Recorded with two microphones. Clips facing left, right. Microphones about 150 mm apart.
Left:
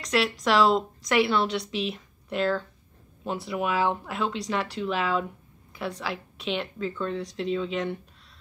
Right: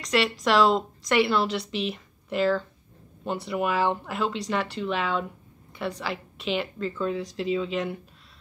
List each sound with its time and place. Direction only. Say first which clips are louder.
0.0 s a woman's voice: right 1 dB; centre (ahead or behind)